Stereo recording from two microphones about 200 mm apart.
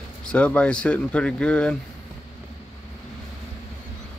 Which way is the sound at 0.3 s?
5° left (ahead or behind).